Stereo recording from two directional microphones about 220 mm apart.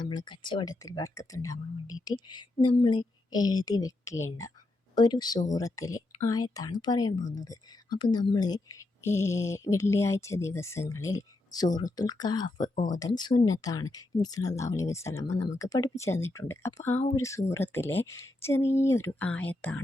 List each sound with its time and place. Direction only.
0.1 s speech: 20° left (ahead or behind)
12.7 s speech: 35° left (ahead or behind)
13.0 s speech: 20° left (ahead or behind)